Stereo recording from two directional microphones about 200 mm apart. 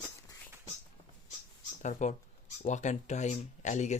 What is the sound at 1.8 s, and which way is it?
Speech, 35° left (ahead or behind).